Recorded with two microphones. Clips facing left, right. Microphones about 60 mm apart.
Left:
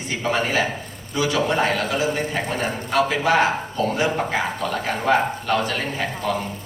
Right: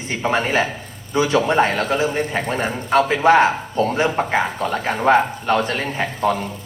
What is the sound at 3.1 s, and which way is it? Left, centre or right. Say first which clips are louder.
Speech: right 6 dB; right.